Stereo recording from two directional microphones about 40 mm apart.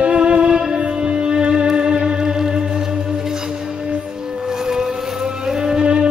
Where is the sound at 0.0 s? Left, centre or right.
Right.